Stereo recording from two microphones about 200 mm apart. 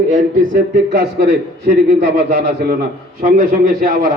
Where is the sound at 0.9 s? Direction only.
55° right (ahead or behind).